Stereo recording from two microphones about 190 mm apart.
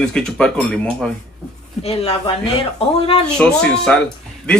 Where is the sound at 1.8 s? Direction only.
30° left (ahead or behind).